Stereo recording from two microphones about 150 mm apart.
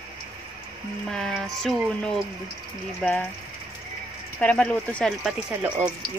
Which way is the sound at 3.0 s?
10° left (ahead or behind).